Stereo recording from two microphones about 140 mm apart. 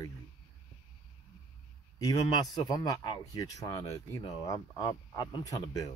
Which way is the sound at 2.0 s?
30° left (ahead or behind).